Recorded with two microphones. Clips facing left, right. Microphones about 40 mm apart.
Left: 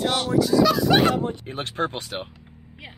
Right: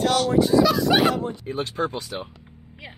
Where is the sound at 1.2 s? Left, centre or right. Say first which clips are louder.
Right 1 dB; left.